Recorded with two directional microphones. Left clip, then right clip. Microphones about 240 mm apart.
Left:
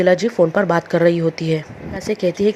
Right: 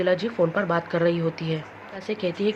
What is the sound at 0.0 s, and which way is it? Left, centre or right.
A woman's voice, left.